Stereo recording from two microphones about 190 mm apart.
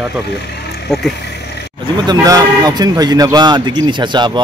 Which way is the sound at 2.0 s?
20° right (ahead or behind).